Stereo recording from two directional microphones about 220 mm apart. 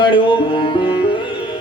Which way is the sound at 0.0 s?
20° left (ahead or behind).